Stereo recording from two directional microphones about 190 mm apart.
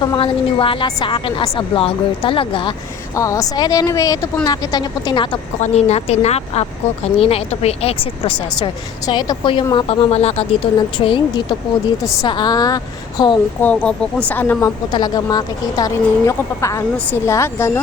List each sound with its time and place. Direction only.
0.0 s speech: 25° left (ahead or behind)
5.5 s speech: 35° left (ahead or behind)
13.6 s speech: 10° left (ahead or behind)
14.8 s speech: 20° left (ahead or behind)